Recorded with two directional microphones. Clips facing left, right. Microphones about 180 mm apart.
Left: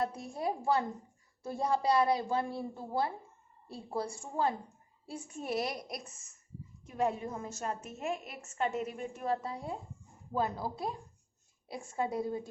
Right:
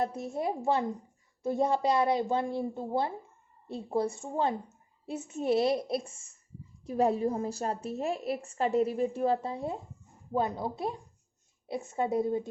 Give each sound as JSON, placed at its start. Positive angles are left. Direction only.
{"t": 0.0, "sound": "a woman's voice", "side_deg": -20}